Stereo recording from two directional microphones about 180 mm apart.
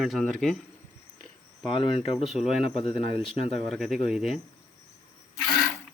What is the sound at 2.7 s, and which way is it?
Speech, 35° left (ahead or behind).